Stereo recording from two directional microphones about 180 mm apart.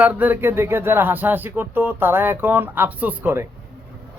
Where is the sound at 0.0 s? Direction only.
10° right (ahead or behind).